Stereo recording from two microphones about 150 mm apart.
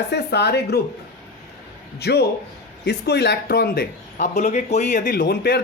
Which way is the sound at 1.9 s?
90° left.